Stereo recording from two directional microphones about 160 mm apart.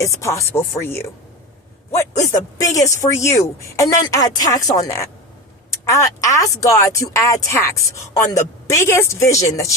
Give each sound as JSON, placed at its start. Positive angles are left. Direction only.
{"t": 0.0, "sound": "speech", "side_deg": 20}